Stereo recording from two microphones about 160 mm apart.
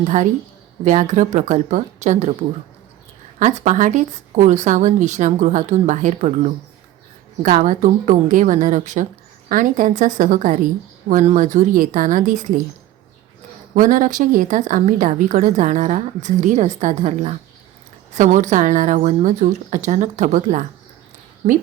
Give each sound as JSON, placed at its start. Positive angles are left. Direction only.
{"t": 0.0, "sound": "a woman's voice", "side_deg": -45}
{"t": 3.3, "sound": "a woman's voice", "side_deg": -50}
{"t": 13.7, "sound": "a woman's voice", "side_deg": -55}